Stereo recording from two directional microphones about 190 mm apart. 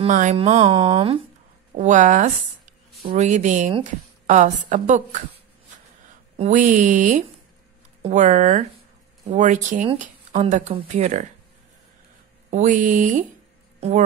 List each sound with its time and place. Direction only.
0.0 s a woman's voice: 40° right (ahead or behind)
6.3 s a woman's voice: 40° right (ahead or behind)
12.4 s a woman's voice: 40° right (ahead or behind)